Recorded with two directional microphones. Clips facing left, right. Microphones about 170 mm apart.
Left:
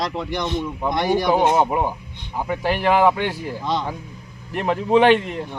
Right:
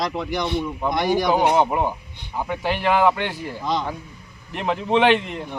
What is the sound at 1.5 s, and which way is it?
Speech, 10° left (ahead or behind).